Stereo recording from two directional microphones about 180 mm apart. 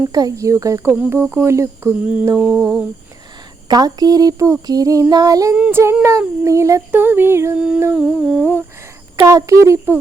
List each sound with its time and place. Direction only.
0.1 s speech: 20° right (ahead or behind)
3.7 s child singing: 20° right (ahead or behind)
5.5 s speech: 10° right (ahead or behind)
7.9 s humming: 5° right (ahead or behind)
9.1 s speech: 20° right (ahead or behind)